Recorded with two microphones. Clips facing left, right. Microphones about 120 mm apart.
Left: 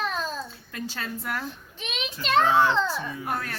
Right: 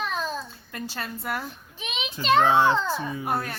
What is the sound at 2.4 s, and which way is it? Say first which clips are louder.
Speech: even; 25° right (ahead or behind).